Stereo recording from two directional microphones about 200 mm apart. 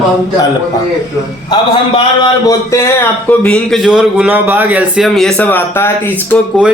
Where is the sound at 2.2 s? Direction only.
15° left (ahead or behind).